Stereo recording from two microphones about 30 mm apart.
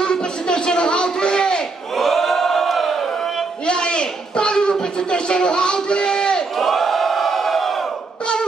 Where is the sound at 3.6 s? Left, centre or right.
Left.